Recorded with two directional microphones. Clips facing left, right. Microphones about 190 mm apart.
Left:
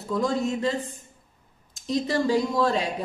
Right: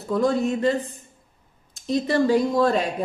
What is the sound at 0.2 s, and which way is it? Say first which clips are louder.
A woman's voice: right 4 dB; 60° right (ahead or behind).